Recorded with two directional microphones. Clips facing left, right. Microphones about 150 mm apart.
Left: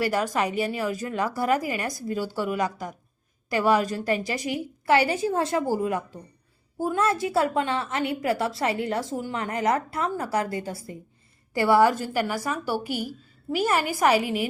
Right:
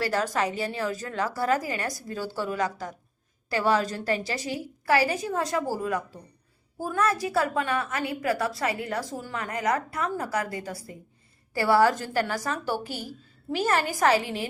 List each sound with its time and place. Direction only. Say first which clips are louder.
0.0 s a woman's voice: left 2 dB; 15° left (ahead or behind)
11.5 s a woman's voice: left 2 dB; 20° left (ahead or behind)